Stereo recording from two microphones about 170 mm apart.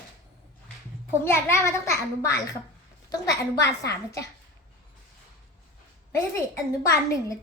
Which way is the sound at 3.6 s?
20° left (ahead or behind).